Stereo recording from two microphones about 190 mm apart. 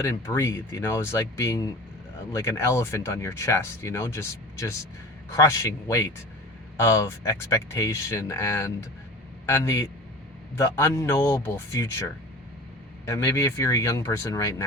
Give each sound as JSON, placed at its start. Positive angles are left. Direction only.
{"t": 0.0, "sound": "speech", "side_deg": 15}
{"t": 13.1, "sound": "speech", "side_deg": 15}